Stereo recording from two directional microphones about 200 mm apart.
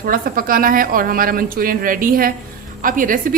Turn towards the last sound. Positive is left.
turn(degrees=-40)  # may be behind; listen again after turning